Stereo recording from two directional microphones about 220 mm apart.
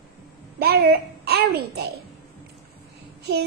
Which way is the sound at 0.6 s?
45° right (ahead or behind).